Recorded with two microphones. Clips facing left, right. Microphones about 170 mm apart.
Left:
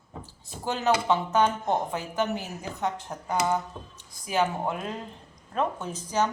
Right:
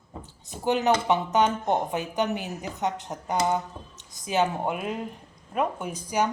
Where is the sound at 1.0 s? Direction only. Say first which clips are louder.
Right 1 dB; 20° right (ahead or behind).